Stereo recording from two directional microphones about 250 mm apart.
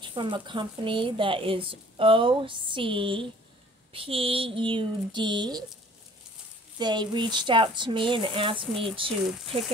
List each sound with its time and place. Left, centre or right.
0.0 s a woman's voice: centre
6.8 s a woman's voice: centre